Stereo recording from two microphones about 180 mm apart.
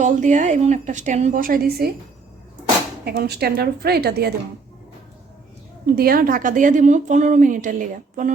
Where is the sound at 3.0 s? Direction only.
60° right (ahead or behind).